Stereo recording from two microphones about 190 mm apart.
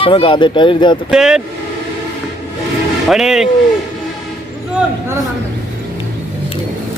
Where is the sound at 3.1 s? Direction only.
Centre (ahead or behind).